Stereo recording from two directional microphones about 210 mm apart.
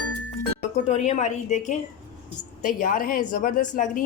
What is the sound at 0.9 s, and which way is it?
A woman's voice, 35° left (ahead or behind).